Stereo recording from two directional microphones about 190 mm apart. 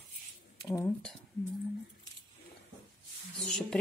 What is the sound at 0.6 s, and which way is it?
Speech, 15° left (ahead or behind).